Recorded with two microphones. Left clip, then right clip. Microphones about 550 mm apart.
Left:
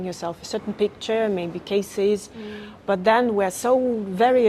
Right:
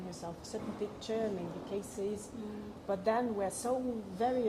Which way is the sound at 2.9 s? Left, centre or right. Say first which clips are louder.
Left 14 dB; left.